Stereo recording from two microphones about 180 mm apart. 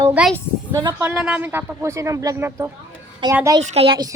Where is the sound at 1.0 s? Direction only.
10° right (ahead or behind).